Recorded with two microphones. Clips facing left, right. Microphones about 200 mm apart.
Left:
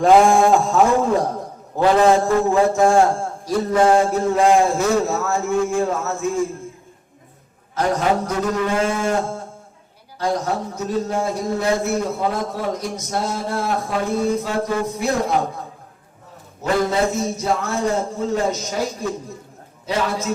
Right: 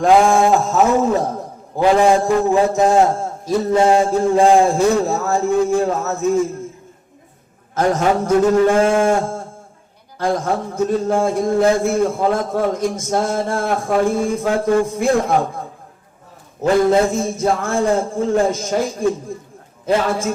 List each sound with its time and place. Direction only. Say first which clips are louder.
0.0 s a man's voice: even; centre (ahead or behind); by 6.2 s 40° right (ahead or behind)
7.8 s a man's voice: right 3 dB; 45° right (ahead or behind)
10.8 s a man's voice: right 8 dB; 50° right (ahead or behind)
16.6 s a man's voice: right 5 dB; 50° right (ahead or behind)